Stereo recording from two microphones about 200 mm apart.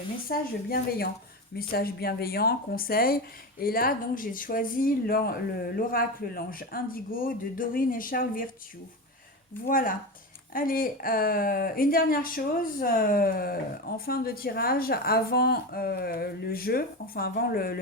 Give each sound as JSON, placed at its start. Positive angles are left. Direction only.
{"t": 0.3, "sound": "speech", "side_deg": 50}
{"t": 9.6, "sound": "speech", "side_deg": 45}